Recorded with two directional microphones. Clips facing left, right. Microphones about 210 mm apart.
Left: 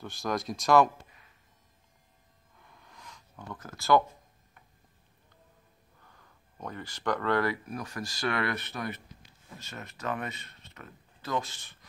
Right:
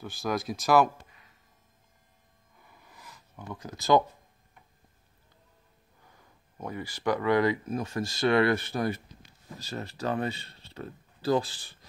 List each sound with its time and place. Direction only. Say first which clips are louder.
0.0 s speech: right 2 dB; centre (ahead or behind)
2.6 s a sound: even; 5° right (ahead or behind)
6.0 s speech: right 2 dB; 10° right (ahead or behind); by 11.8 s 35° right (ahead or behind)